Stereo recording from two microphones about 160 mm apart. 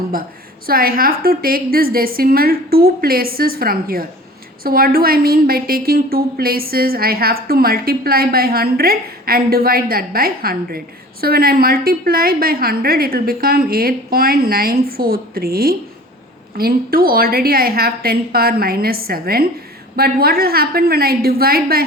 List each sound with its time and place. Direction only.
0.7 s a woman's voice: 65° right (ahead or behind)